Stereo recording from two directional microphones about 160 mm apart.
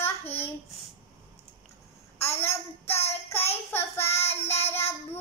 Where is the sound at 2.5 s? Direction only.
40° left (ahead or behind).